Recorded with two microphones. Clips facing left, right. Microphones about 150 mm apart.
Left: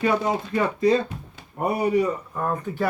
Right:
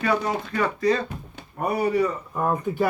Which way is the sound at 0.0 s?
20° left (ahead or behind).